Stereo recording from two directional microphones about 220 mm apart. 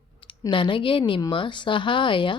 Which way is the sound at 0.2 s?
20° left (ahead or behind).